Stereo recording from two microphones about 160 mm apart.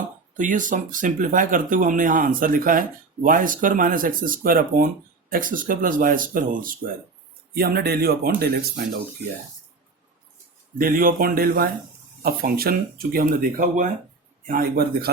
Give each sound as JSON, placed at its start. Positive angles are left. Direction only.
{"t": 0.3, "sound": "speech", "side_deg": -55}
{"t": 7.5, "sound": "speech", "side_deg": -75}
{"t": 10.8, "sound": "speech", "side_deg": -60}